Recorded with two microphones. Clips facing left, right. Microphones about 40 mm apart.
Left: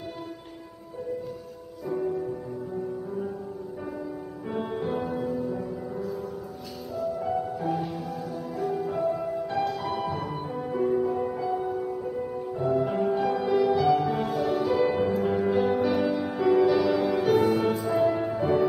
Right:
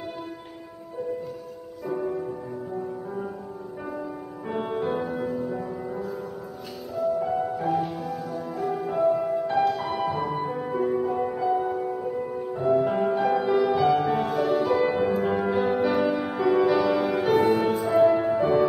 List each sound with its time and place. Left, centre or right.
1.9 s music: centre
4.5 s music: right
7.2 s music: centre